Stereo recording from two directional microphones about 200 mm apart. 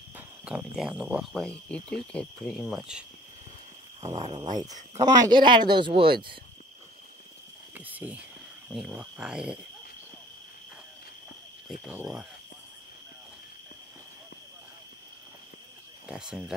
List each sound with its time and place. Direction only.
0.1 s speech: 5° right (ahead or behind)
2.1 s cricket: centre (ahead or behind)
4.0 s speech: 30° right (ahead or behind)
7.7 s cricket: 10° right (ahead or behind)
11.8 s cricket: 5° right (ahead or behind)
16.1 s cricket: 5° right (ahead or behind)